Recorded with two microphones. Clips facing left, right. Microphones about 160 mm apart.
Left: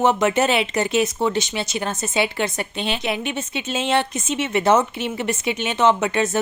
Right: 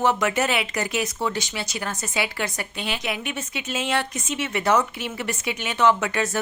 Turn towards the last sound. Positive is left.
turn(degrees=25)  # may be behind; listen again after turning